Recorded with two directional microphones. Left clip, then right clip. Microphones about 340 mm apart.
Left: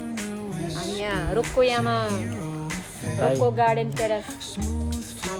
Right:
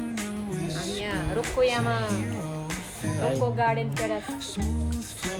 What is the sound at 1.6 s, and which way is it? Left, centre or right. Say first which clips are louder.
Speech: left 2 dB; left.